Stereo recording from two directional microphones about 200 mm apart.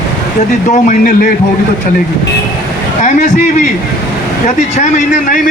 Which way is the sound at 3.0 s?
40° left (ahead or behind).